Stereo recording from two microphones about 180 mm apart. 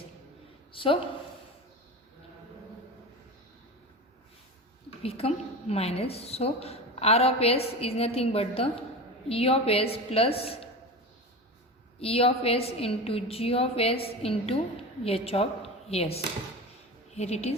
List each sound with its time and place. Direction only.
0.7 s a sound: 30° left (ahead or behind)
5.0 s a woman's voice: 35° left (ahead or behind)
11.9 s a woman's voice: 35° left (ahead or behind)